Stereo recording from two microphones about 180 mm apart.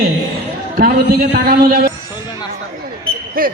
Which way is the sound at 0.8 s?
50° right (ahead or behind).